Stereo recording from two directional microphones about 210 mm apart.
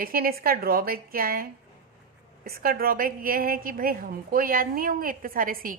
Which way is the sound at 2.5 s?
45° right (ahead or behind).